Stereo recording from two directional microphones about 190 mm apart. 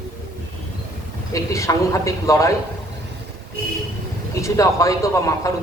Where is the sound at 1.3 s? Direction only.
15° left (ahead or behind).